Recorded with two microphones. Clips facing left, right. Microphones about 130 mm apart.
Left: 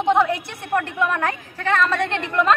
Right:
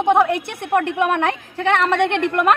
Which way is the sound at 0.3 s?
65° right (ahead or behind).